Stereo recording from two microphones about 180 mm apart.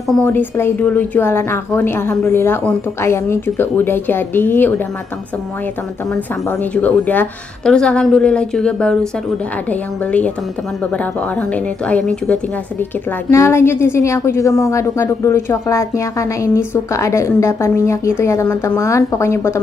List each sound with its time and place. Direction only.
0.1 s a woman's voice: 10° left (ahead or behind)
6.6 s a woman's voice: 10° left (ahead or behind)
13.3 s a woman's voice: 15° left (ahead or behind)